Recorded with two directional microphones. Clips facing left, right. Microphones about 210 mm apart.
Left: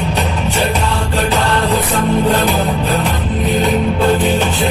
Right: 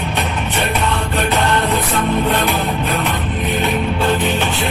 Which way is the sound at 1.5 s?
30° left (ahead or behind).